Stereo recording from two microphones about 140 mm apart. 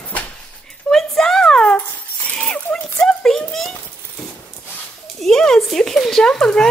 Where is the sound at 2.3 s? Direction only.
10° left (ahead or behind).